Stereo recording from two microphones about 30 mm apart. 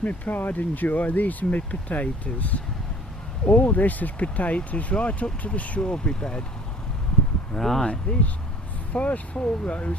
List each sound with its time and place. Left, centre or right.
0.0 s speech: left
5.8 s speech: left
7.6 s speech: centre
8.1 s speech: left
9.3 s speech: left